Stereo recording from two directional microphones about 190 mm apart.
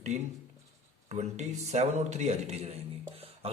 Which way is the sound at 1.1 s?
35° right (ahead or behind).